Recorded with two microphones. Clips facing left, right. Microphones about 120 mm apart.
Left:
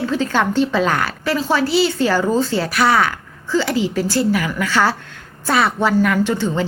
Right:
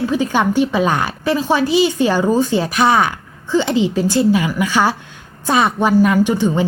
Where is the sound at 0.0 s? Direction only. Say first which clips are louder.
Right 2 dB; 15° right (ahead or behind).